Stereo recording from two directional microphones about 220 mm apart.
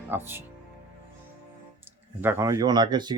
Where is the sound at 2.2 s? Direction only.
10° right (ahead or behind).